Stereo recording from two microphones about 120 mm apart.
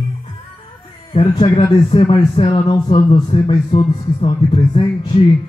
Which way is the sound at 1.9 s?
50° left (ahead or behind).